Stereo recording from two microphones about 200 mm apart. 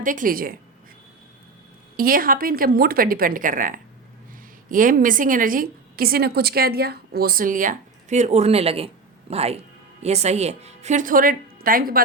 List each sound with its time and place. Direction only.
0.0 s a woman's voice: 40° right (ahead or behind)
2.0 s a woman's voice: 45° right (ahead or behind)